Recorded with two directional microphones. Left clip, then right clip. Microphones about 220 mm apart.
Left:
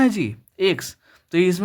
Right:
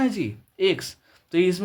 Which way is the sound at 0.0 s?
30° left (ahead or behind).